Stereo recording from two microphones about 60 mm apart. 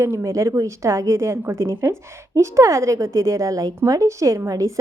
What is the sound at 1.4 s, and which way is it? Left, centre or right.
A woman's voice, right.